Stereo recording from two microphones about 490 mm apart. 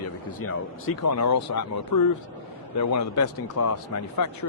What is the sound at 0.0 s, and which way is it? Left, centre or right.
Speech, left.